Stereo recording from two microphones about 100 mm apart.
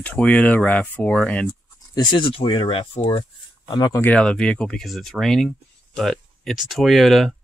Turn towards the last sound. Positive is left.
turn(degrees=0)  # may be behind; listen again after turning